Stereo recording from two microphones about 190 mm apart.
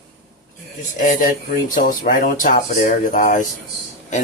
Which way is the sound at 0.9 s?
40° left (ahead or behind).